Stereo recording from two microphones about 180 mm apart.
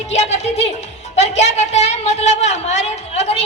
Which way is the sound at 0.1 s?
35° left (ahead or behind).